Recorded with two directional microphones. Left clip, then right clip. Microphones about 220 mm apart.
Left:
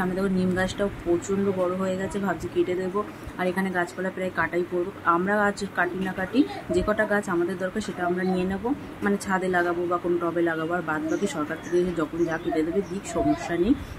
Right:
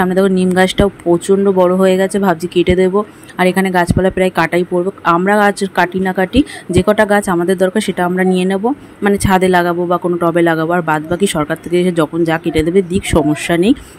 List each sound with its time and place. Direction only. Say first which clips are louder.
0.0 s speech: right 14 dB; 40° right (ahead or behind)